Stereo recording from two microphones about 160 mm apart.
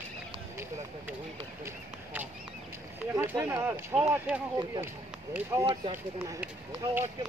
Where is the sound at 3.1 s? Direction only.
15° right (ahead or behind).